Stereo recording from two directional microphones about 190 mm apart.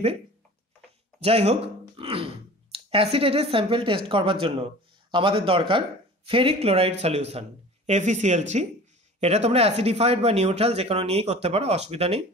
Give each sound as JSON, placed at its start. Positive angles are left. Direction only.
{"t": 1.2, "sound": "speech", "side_deg": -30}